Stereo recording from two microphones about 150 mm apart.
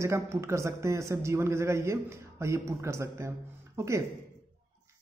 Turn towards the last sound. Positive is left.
turn(degrees=-20)  # may be behind; listen again after turning